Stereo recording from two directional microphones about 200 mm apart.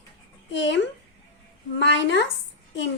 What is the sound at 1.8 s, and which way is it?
Speech, 60° left (ahead or behind).